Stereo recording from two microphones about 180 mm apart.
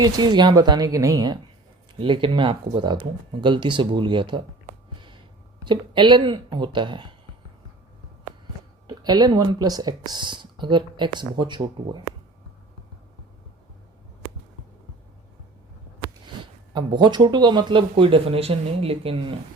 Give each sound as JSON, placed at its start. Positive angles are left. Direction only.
{"t": 0.0, "sound": "speech", "side_deg": -25}
{"t": 4.9, "sound": "a sound", "side_deg": -25}
{"t": 5.6, "sound": "speech", "side_deg": -25}
{"t": 8.9, "sound": "speech", "side_deg": -25}
{"t": 16.2, "sound": "speech", "side_deg": -25}